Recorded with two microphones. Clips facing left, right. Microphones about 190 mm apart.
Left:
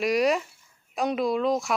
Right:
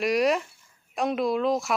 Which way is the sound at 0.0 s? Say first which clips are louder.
Even; centre (ahead or behind).